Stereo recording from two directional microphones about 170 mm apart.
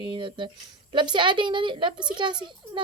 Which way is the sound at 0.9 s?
25° right (ahead or behind).